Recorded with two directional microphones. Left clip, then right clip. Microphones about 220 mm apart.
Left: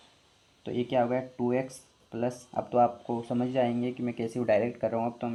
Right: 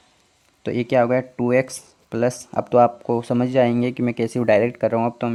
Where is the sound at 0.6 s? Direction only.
45° right (ahead or behind).